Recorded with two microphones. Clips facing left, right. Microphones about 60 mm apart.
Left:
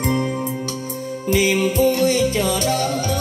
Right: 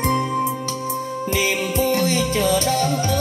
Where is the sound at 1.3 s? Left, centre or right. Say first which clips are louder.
Left 5 dB; right.